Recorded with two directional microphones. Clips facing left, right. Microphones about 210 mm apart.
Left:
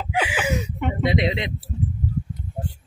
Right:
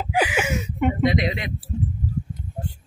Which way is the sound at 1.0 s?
25° left (ahead or behind).